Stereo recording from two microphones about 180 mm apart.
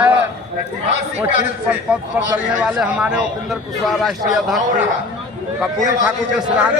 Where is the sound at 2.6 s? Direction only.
5° right (ahead or behind).